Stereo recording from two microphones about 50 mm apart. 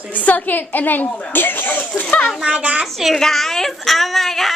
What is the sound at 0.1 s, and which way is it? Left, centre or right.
A woman's voice, left.